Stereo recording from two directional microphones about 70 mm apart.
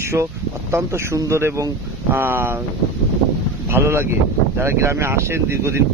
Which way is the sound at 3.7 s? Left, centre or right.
Right.